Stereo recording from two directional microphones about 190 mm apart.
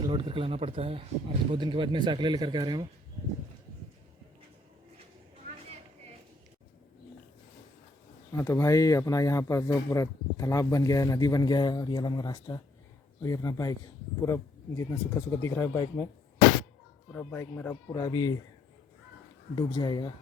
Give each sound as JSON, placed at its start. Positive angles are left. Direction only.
{"t": 0.0, "sound": "speech", "side_deg": -25}
{"t": 8.3, "sound": "speech", "side_deg": 15}
{"t": 17.1, "sound": "speech", "side_deg": 10}
{"t": 19.5, "sound": "speech", "side_deg": 20}